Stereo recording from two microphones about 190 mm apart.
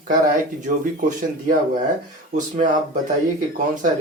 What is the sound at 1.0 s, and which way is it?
Speech, 45° right (ahead or behind).